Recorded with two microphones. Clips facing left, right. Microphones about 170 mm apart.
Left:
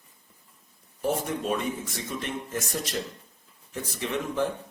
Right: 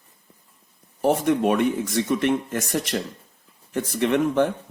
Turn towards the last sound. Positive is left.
turn(degrees=-65)  # may be behind; listen again after turning